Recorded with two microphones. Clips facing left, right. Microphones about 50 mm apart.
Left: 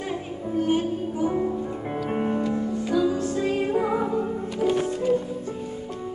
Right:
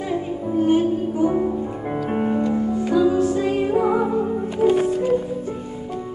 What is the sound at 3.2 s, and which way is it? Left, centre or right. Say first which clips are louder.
Music: right 5 dB; centre.